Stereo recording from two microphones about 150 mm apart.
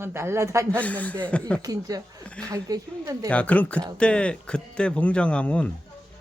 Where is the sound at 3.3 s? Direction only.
10° left (ahead or behind).